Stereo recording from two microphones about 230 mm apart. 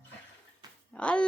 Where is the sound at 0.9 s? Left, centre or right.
Centre.